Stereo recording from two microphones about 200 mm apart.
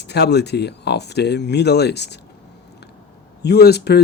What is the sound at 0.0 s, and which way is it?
Speech, 55° left (ahead or behind).